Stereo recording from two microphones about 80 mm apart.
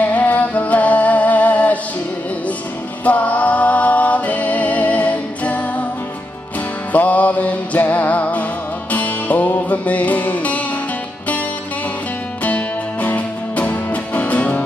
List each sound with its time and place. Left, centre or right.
0.0 s music: centre
3.1 s music: centre
6.9 s music: centre
12.4 s music: centre